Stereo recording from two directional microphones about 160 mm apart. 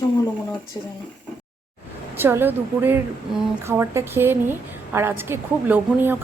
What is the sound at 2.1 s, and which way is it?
A woman's voice, 15° right (ahead or behind).